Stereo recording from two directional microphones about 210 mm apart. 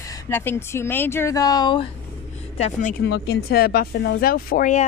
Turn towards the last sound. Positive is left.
turn(degrees=40)  # may be behind; listen again after turning